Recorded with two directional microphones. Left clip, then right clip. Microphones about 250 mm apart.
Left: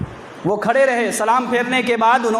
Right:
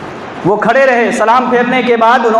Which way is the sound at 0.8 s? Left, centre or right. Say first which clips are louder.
Right 7 dB; left.